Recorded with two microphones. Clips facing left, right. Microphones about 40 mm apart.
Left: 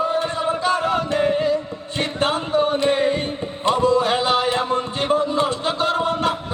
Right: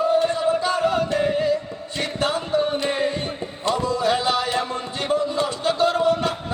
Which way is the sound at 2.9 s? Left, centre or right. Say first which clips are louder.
Left 4 dB; left.